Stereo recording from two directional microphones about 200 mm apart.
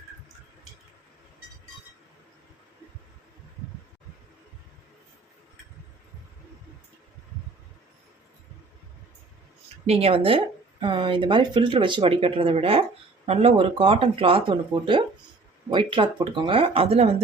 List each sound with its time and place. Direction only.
9.8 s speech: 30° right (ahead or behind)